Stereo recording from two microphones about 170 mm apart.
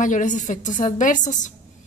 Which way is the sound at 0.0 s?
50° left (ahead or behind).